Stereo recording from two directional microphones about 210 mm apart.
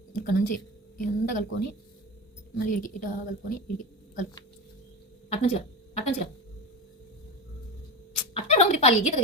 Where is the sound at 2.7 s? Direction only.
40° left (ahead or behind).